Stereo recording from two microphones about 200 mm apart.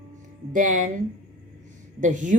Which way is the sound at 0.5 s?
40° right (ahead or behind).